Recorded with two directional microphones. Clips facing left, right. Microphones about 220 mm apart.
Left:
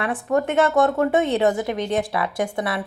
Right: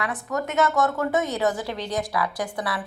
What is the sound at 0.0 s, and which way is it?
A woman's voice, 30° left (ahead or behind).